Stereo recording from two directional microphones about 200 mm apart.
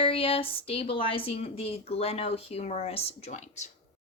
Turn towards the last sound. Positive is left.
turn(degrees=35)  # may be behind; listen again after turning